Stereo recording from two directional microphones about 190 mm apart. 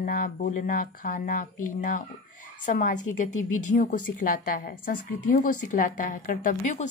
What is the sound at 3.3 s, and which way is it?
Speech, 90° left.